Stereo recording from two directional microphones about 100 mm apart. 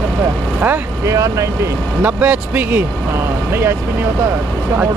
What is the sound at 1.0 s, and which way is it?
Speech, 30° right (ahead or behind).